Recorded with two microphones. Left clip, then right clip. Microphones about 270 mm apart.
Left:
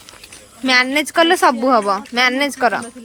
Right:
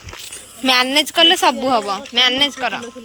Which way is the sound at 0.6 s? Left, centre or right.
Centre.